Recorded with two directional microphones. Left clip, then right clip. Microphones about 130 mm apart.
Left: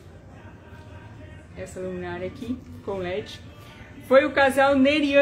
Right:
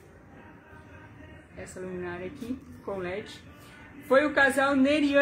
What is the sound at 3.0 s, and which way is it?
A woman's voice, 15° left (ahead or behind).